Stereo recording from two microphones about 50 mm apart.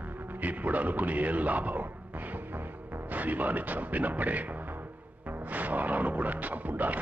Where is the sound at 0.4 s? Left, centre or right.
Right.